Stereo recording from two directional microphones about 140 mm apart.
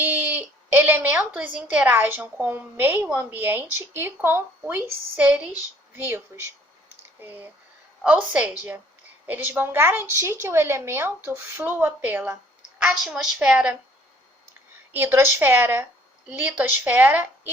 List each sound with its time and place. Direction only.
0.0 s a woman's voice: 10° right (ahead or behind)
12.8 s a woman's voice: centre (ahead or behind)
14.9 s a woman's voice: 15° right (ahead or behind)